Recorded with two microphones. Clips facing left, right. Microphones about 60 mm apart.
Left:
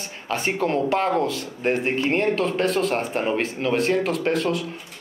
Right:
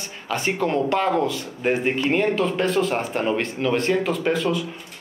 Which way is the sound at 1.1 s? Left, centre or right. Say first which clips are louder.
Right 1 dB; centre.